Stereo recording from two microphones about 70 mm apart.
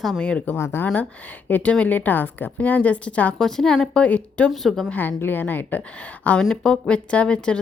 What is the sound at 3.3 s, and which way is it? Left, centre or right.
Speech, centre.